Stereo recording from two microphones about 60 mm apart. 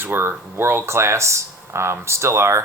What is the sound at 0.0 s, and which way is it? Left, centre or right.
Speech, right.